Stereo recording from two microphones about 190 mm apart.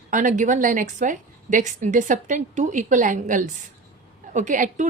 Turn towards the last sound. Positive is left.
turn(degrees=-40)  # may be behind; listen again after turning